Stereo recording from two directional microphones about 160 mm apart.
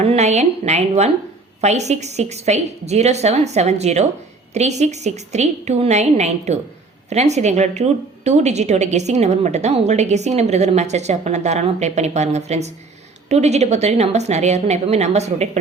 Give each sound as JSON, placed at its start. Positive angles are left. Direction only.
{"t": 0.0, "sound": "a woman's voice", "side_deg": -45}